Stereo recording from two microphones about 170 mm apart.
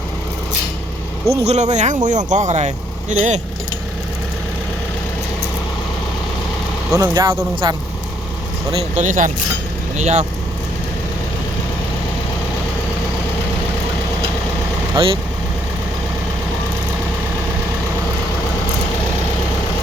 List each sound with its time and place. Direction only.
1.3 s speech: 40° right (ahead or behind)
7.0 s speech: 20° right (ahead or behind)
8.7 s speech: 45° right (ahead or behind)
14.9 s speech: 30° right (ahead or behind)